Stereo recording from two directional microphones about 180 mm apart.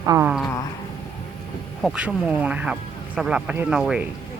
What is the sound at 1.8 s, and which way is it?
Speech, 5° right (ahead or behind).